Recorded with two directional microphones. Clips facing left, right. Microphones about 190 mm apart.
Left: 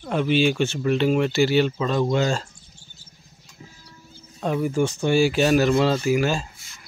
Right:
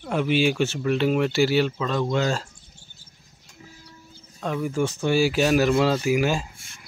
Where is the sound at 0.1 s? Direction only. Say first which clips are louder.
Left 1 dB; 10° right (ahead or behind).